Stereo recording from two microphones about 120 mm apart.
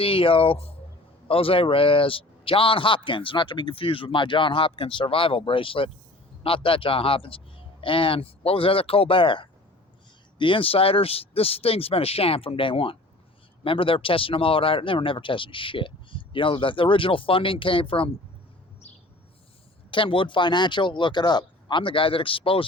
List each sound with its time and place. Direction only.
0.0 s a man's voice: 50° left (ahead or behind)
19.9 s a man's voice: 45° left (ahead or behind)